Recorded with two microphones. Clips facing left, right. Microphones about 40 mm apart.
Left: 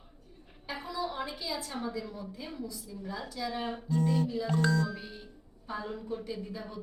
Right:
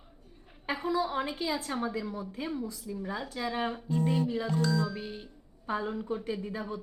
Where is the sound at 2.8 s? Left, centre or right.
Right.